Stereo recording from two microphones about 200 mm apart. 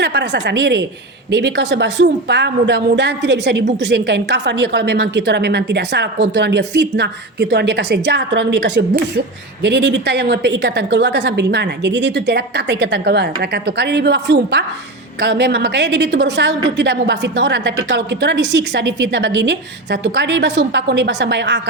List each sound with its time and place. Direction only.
0.0 s a woman's voice: 60° right (ahead or behind)